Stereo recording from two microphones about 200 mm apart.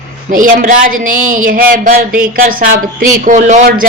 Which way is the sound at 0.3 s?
40° right (ahead or behind).